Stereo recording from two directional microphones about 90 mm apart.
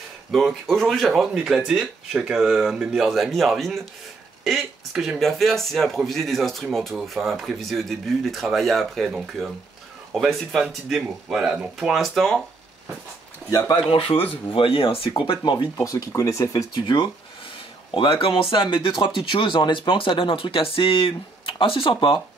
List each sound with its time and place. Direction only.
0.3 s speech: centre (ahead or behind)
13.5 s speech: 45° left (ahead or behind)
13.8 s speech: 90° left; by 15.7 s 60° left (ahead or behind)
15.8 s speech: 40° left (ahead or behind)
16.8 s speech: 50° left (ahead or behind)
17.9 s speech: 80° left